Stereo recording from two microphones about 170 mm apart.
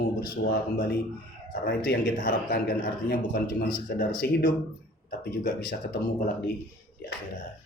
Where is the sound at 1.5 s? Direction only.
55° left (ahead or behind).